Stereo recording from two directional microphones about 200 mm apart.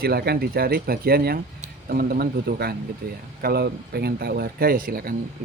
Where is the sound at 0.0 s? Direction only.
50° right (ahead or behind).